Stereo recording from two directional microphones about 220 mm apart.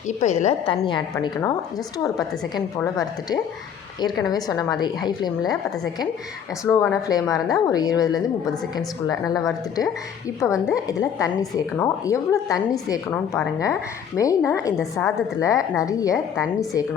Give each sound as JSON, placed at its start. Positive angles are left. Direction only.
{"t": 0.2, "sound": "a woman's voice", "side_deg": 30}
{"t": 2.8, "sound": "a woman's voice", "side_deg": 15}
{"t": 6.7, "sound": "a woman's voice", "side_deg": 10}
{"t": 16.1, "sound": "a woman's voice", "side_deg": 0}